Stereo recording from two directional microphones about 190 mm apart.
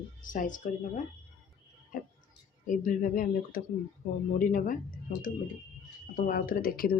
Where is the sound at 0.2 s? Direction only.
45° left (ahead or behind).